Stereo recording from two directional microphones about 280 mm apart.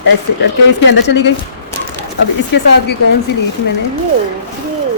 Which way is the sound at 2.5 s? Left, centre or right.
Left.